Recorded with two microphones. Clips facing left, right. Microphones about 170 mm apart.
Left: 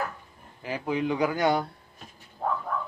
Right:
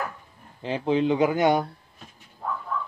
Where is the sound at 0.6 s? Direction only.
25° right (ahead or behind).